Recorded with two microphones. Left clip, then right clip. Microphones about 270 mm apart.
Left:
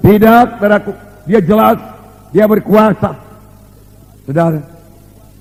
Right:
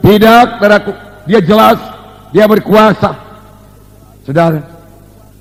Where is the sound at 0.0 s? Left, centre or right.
Right.